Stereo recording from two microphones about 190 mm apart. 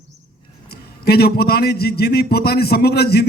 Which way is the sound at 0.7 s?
55° left (ahead or behind).